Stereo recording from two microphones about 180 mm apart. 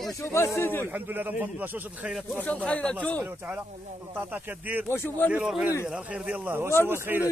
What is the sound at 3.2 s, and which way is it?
A man's voice, 10° right (ahead or behind).